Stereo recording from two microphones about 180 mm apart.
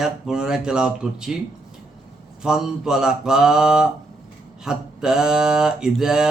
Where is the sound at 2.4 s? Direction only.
5° right (ahead or behind).